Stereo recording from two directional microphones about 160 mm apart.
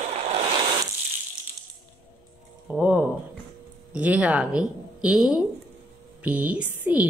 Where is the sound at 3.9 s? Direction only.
10° right (ahead or behind).